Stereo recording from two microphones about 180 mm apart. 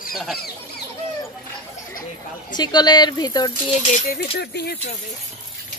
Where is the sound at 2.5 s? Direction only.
25° left (ahead or behind).